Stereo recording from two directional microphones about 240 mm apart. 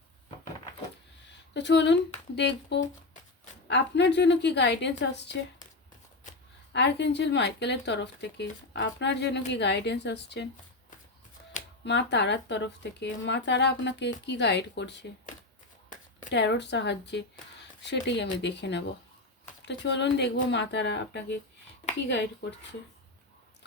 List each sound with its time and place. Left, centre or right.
1.5 s speech: left
6.7 s speech: left
11.9 s speech: left
16.3 s speech: left